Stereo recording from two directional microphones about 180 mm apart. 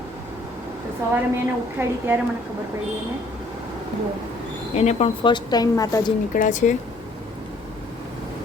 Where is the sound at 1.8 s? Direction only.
10° right (ahead or behind).